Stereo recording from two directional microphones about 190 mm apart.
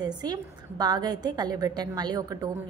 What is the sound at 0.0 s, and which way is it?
A woman's voice, 20° right (ahead or behind).